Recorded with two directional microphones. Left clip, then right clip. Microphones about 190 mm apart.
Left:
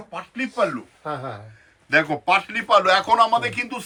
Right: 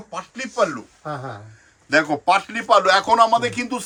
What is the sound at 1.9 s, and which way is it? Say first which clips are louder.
A man's voice: right 1 dB; 60° right (ahead or behind).